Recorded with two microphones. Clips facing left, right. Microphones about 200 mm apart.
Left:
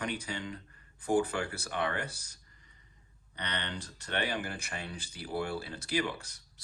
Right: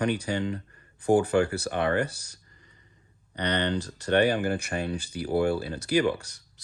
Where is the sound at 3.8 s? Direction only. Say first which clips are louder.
Right 13 dB; 75° right (ahead or behind).